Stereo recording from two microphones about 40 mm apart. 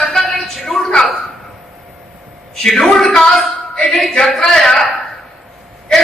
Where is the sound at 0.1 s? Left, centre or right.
Centre.